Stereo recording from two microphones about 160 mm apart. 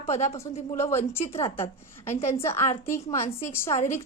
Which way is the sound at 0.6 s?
15° left (ahead or behind).